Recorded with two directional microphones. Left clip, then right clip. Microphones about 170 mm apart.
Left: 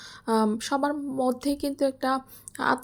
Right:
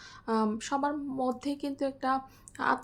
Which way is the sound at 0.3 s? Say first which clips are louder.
Left 5 dB; 25° left (ahead or behind).